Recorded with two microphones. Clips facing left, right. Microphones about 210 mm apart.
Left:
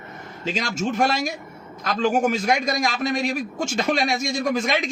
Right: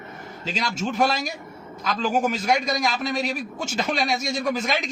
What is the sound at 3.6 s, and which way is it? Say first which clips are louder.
Speech: left 2 dB; 5° right (ahead or behind).